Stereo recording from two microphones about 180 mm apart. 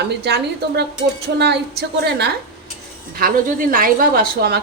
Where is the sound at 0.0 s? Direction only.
65° right (ahead or behind).